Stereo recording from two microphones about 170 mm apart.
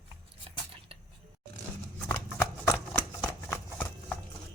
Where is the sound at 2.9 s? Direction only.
10° left (ahead or behind).